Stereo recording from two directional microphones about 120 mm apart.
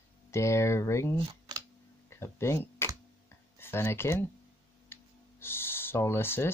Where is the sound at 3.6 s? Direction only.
20° left (ahead or behind).